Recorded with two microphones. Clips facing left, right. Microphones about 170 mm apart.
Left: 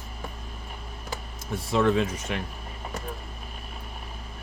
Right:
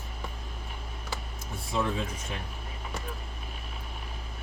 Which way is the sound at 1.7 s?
80° left.